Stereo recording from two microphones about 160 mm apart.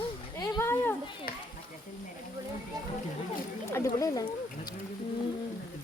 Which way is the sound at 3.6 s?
20° left (ahead or behind).